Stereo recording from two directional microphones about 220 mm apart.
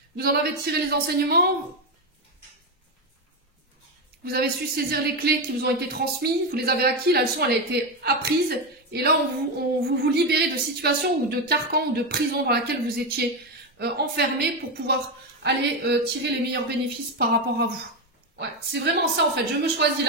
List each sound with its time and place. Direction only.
0.1 s a woman's voice: 45° right (ahead or behind)
4.2 s a woman's voice: 45° right (ahead or behind)